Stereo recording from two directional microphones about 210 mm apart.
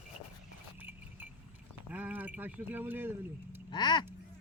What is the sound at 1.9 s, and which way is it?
Speech, 10° right (ahead or behind).